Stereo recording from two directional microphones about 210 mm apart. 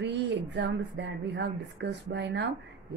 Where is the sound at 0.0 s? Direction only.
55° right (ahead or behind).